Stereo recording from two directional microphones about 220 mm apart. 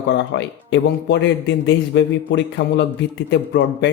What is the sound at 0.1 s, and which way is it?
Speech, 55° left (ahead or behind).